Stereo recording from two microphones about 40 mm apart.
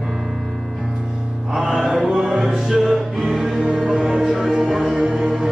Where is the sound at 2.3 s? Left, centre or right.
Centre.